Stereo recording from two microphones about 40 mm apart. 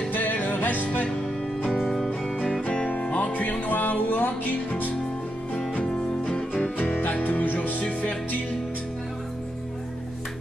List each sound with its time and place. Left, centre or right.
0.1 s music: left
1.7 s music: centre
2.9 s music: left
5.9 s music: left
6.9 s music: left